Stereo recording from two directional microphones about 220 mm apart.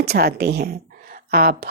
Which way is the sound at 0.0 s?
45° right (ahead or behind).